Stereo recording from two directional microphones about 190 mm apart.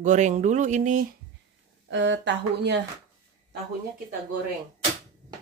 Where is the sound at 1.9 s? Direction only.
70° right (ahead or behind).